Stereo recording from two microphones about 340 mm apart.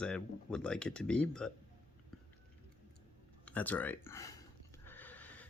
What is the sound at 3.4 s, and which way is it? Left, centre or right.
Speech, centre.